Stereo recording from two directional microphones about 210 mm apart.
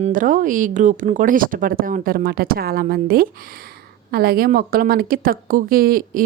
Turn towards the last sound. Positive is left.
turn(degrees=-40)  # may be behind; listen again after turning